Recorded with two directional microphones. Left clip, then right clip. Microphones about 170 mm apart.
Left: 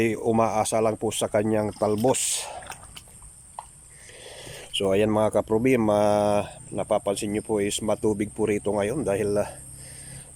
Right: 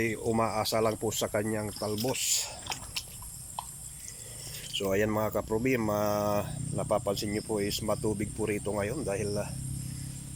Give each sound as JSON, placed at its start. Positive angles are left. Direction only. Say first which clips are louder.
{"t": 0.0, "sound": "speech", "louder": "left 7 dB", "side_deg": 15}
{"t": 4.4, "sound": "speech", "louder": "left 7 dB", "side_deg": 20}